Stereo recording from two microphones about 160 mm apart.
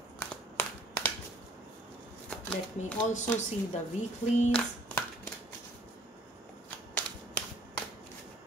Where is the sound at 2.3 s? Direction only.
5° left (ahead or behind).